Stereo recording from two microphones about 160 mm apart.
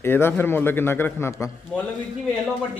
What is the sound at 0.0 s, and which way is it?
A man's voice, 15° left (ahead or behind).